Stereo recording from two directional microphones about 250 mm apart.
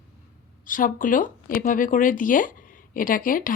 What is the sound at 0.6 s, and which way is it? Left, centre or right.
Speech, left.